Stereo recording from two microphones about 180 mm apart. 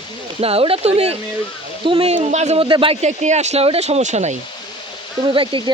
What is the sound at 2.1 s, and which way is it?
Speech, 40° right (ahead or behind).